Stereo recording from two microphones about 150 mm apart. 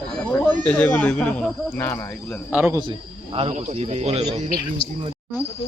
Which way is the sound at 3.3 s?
45° right (ahead or behind).